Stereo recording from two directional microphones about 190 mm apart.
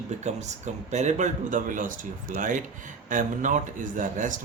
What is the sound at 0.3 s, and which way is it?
A man's voice, 35° right (ahead or behind).